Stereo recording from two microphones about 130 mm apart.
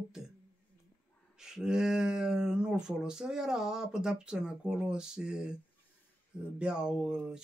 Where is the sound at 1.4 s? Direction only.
5° right (ahead or behind).